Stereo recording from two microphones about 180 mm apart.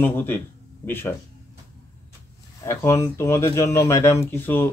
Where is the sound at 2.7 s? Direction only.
15° left (ahead or behind).